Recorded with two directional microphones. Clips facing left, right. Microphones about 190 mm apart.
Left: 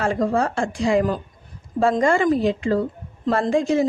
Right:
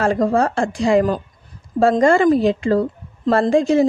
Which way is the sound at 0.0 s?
40° right (ahead or behind).